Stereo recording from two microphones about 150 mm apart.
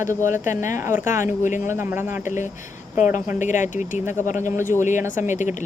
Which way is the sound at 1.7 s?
15° right (ahead or behind).